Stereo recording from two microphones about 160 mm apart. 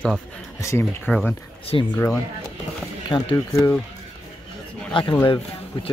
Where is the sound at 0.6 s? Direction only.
15° left (ahead or behind).